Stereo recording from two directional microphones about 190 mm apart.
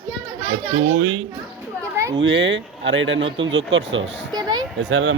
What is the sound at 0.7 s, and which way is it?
Speech, 80° right.